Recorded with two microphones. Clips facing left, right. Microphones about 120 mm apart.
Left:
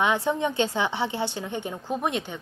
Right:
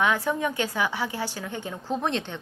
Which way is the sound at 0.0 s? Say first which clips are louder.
Left 1 dB; 20° left (ahead or behind).